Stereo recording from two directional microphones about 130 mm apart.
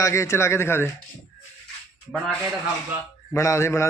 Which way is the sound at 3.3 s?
25° left (ahead or behind).